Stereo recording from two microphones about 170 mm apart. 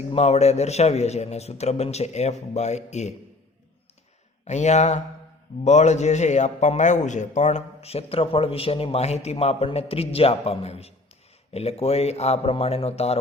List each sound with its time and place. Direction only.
0.1 s a man's voice: 40° left (ahead or behind)
4.4 s a man's voice: 40° left (ahead or behind)